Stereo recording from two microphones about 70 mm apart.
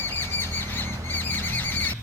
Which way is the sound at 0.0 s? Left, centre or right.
Left.